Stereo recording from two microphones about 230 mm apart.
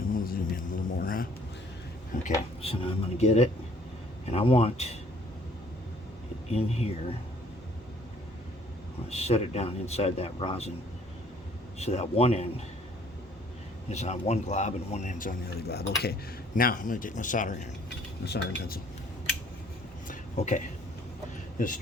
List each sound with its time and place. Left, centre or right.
0.1 s a sound: left
2.6 s speech: left
6.5 s speech: left
9.0 s speech: left
11.8 s speech: left
13.9 s speech: left
20.1 s a sound: left